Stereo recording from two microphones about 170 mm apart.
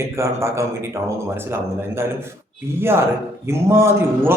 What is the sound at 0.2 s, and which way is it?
Speech, 15° right (ahead or behind).